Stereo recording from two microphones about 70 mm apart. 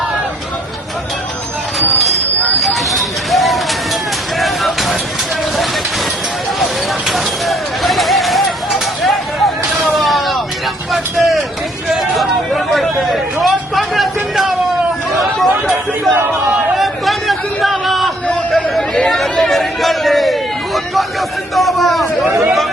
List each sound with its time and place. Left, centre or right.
2.6 s bird: centre
4.4 s vehicle: centre
7.1 s a sound: centre
10.9 s vehicle: centre
11.9 s chatter: centre
15.2 s a sound: centre
18.5 s chatter: centre
19.1 s a sound: centre
22.3 s speech: right